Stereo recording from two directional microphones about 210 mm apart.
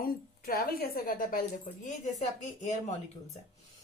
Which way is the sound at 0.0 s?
45° left (ahead or behind).